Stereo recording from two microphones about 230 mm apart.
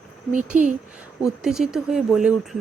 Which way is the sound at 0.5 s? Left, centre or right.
Right.